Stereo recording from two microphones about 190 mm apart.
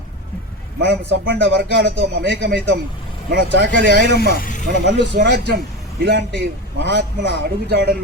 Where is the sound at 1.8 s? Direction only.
60° right (ahead or behind).